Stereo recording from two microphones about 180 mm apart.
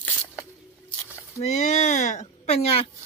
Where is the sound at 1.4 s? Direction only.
40° left (ahead or behind).